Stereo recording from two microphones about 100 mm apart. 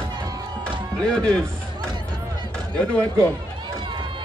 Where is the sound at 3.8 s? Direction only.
50° right (ahead or behind).